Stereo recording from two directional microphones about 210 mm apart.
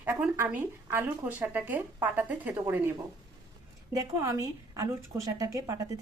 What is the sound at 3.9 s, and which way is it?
Speech, 15° right (ahead or behind).